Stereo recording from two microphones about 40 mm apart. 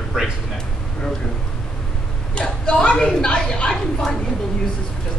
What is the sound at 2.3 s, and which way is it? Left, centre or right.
A woman's voice, left.